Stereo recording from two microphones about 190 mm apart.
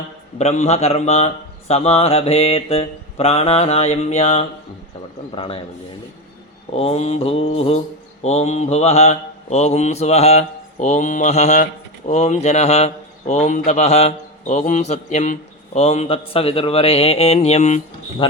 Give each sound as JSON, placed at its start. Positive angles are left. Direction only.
{"t": 0.3, "sound": "mantra", "side_deg": 35}
{"t": 5.3, "sound": "a man's voice", "side_deg": 30}
{"t": 6.7, "sound": "mantra", "side_deg": 35}